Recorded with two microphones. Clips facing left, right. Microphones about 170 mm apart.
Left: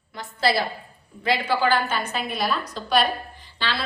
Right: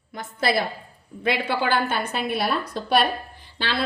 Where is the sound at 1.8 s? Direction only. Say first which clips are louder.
Right 2 dB; 60° right (ahead or behind).